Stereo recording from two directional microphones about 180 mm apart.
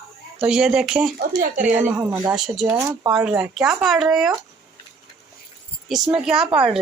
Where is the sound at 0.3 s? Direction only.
5° right (ahead or behind).